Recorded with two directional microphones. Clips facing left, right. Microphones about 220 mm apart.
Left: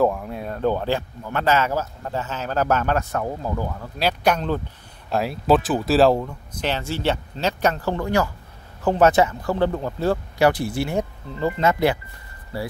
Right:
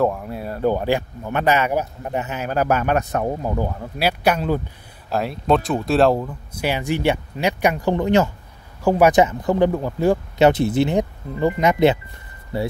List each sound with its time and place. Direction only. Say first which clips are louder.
0.0 s speech: even; centre (ahead or behind); by 3.9 s 25° right (ahead or behind)
4.0 s speech: right 1 dB; 10° right (ahead or behind)
8.8 s speech: right 2 dB; 10° right (ahead or behind)